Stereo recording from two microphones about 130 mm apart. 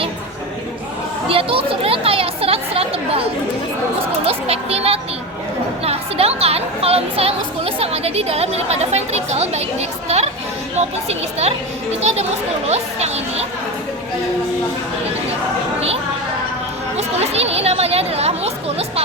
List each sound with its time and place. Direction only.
1.3 s children playing: 45° right (ahead or behind)
4.3 s music: 50° right (ahead or behind)
5.8 s a sound: 50° right (ahead or behind)
10.8 s speech: 55° right (ahead or behind)
17.0 s chatter: 55° right (ahead or behind)